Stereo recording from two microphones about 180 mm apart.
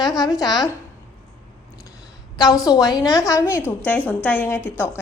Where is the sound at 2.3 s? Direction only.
20° left (ahead or behind).